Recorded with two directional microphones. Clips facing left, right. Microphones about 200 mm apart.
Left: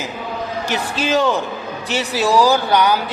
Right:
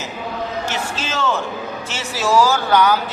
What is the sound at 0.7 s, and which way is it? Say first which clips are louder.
A man's voice: left 6 dB; 15° left (ahead or behind).